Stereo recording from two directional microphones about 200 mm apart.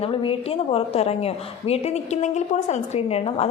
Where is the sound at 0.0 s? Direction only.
25° left (ahead or behind).